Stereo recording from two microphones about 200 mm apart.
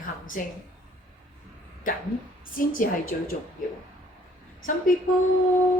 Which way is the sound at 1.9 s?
45° left (ahead or behind).